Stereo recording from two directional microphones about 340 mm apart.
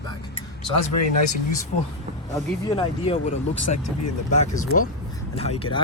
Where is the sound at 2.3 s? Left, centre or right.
Centre.